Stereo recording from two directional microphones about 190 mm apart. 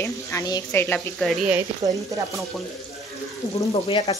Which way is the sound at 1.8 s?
15° right (ahead or behind).